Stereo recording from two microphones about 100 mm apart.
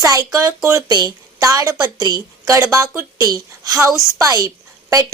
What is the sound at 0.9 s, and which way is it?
A woman's voice, 40° right (ahead or behind).